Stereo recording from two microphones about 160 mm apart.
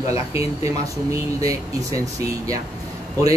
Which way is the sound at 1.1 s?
20° right (ahead or behind).